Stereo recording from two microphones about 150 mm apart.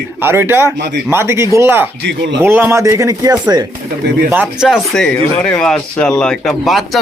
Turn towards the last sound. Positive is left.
turn(degrees=0)  # may be behind; listen again after turning